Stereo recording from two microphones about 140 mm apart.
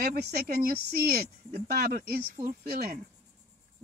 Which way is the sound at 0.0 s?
90° right.